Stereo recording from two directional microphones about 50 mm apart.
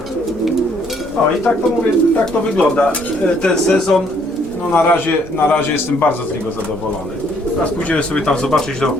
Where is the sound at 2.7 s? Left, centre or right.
Left.